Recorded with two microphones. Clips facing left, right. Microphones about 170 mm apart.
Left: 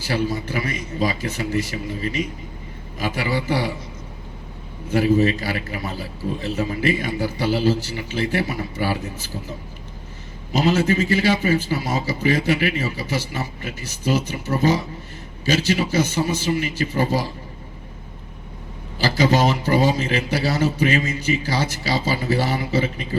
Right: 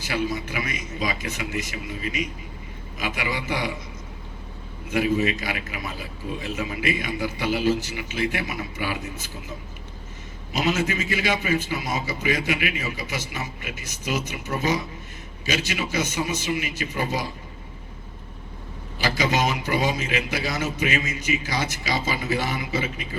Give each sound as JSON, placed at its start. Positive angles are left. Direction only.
{"t": 0.0, "sound": "a man's voice", "side_deg": 35}
{"t": 4.9, "sound": "a man's voice", "side_deg": 35}
{"t": 10.5, "sound": "a man's voice", "side_deg": 35}
{"t": 18.9, "sound": "a man's voice", "side_deg": 35}